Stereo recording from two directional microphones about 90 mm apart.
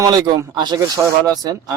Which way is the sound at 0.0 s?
45° right (ahead or behind).